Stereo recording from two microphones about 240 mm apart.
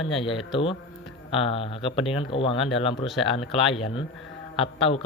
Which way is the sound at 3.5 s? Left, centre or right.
Left.